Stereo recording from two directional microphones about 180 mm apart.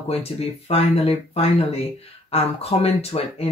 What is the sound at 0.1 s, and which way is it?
Speech, 35° left (ahead or behind).